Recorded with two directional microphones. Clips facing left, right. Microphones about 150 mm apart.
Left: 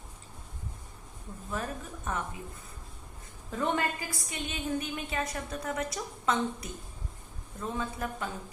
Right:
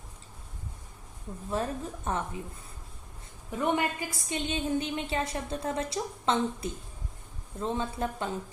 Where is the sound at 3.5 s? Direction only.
15° right (ahead or behind).